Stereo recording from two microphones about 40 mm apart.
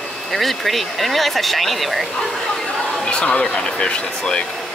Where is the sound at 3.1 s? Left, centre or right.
Left.